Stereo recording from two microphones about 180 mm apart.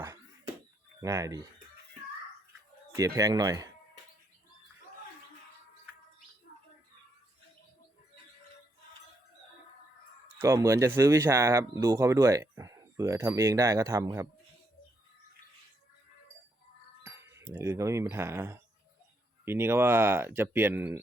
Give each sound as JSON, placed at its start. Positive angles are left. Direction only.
{"t": 1.0, "sound": "speech", "side_deg": -20}
{"t": 2.9, "sound": "speech", "side_deg": -20}
{"t": 10.4, "sound": "speech", "side_deg": -15}
{"t": 17.0, "sound": "speech", "side_deg": -15}